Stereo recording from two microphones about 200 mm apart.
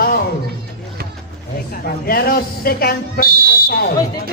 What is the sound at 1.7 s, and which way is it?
Speech, 50° left (ahead or behind).